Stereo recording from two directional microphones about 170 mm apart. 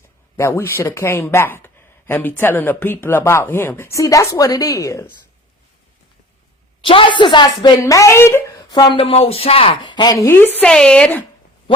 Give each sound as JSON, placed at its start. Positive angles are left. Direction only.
{"t": 0.3, "sound": "speech", "side_deg": 15}
{"t": 6.8, "sound": "speech", "side_deg": 30}